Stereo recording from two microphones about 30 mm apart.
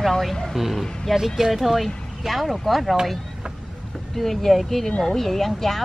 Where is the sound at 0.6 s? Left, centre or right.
Centre.